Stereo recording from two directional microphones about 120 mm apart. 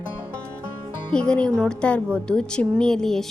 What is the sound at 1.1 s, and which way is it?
A woman's voice, 10° left (ahead or behind).